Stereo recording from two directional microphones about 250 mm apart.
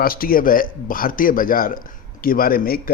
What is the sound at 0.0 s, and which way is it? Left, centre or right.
Speech, left.